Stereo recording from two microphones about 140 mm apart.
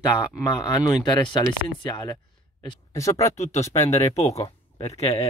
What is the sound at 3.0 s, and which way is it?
Speech, 20° left (ahead or behind).